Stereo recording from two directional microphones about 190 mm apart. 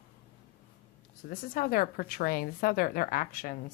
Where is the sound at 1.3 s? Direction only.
50° left (ahead or behind).